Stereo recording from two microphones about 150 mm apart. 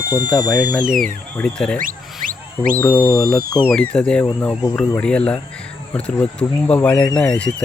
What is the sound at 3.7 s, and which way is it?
Speech, 5° left (ahead or behind).